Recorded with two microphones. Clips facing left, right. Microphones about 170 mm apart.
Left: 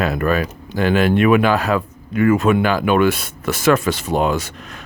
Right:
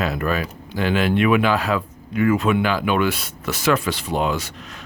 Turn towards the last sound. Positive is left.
turn(degrees=45)  # may be behind; listen again after turning